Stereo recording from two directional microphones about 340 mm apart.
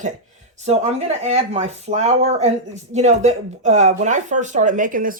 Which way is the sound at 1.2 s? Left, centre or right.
Centre.